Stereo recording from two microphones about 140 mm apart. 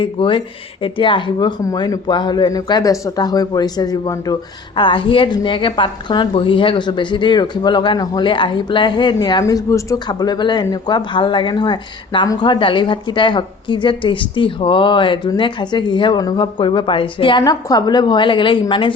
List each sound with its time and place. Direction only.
0.0 s speech: 40° left (ahead or behind)
17.4 s speech: 30° left (ahead or behind)